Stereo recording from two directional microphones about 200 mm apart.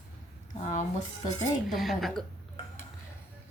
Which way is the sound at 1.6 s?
Centre (ahead or behind).